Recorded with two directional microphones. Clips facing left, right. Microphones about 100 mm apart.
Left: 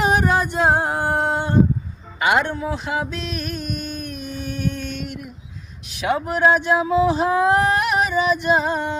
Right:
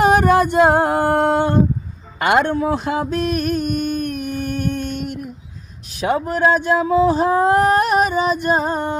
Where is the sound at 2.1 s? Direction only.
55° right (ahead or behind).